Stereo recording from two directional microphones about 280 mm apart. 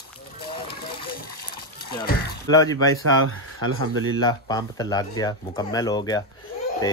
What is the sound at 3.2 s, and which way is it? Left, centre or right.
Speech, right.